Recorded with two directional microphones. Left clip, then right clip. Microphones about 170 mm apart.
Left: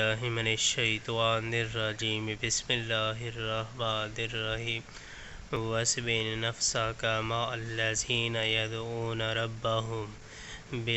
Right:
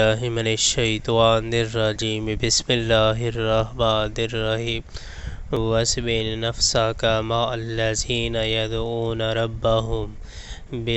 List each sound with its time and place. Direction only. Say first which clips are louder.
0.0 s speech: right 9 dB; 50° right (ahead or behind)
8.8 s speech: right 10 dB; 20° right (ahead or behind)
9.1 s speech: right 8 dB; 45° right (ahead or behind)
9.8 s speech: right 9 dB; 20° right (ahead or behind)